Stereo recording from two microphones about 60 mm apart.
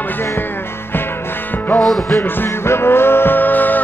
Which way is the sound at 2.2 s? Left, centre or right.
Left.